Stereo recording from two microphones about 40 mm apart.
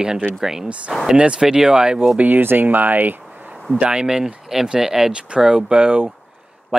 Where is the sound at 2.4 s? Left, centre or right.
Right.